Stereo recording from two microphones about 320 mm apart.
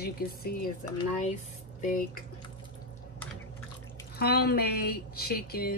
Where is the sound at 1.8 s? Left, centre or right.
Left.